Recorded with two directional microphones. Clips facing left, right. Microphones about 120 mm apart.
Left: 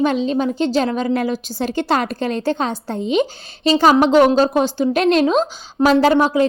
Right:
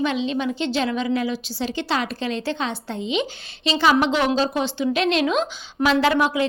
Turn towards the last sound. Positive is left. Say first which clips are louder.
# left 5 dB
turn(degrees=35)  # may be behind; listen again after turning